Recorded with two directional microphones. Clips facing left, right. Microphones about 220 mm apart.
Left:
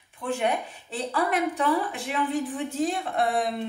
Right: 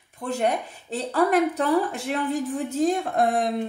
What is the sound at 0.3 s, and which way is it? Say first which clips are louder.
Speech: right 2 dB; 40° right (ahead or behind).